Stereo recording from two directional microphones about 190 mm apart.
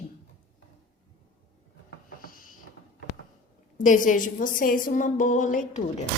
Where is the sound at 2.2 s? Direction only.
50° left (ahead or behind).